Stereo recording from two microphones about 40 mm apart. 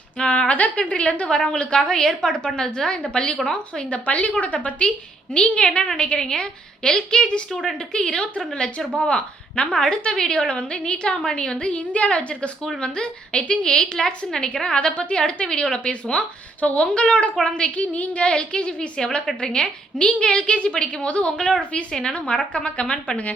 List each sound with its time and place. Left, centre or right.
0.2 s a woman's voice: left
1.5 s a woman's voice: centre
3.1 s a woman's voice: left
4.0 s a woman's voice: left